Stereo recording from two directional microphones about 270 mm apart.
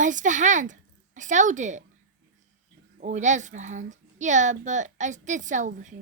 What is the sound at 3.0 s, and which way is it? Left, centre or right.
A woman's voice, right.